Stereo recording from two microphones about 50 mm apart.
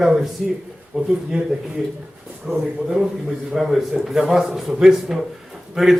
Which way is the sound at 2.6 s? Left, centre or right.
Centre.